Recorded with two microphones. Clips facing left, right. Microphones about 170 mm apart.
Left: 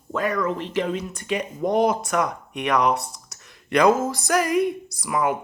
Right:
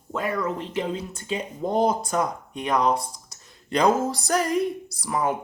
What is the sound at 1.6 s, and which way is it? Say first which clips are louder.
Speech: left 2 dB; 30° right (ahead or behind).